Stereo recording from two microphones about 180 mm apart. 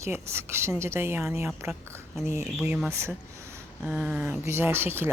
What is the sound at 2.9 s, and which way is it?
Speech, 15° right (ahead or behind).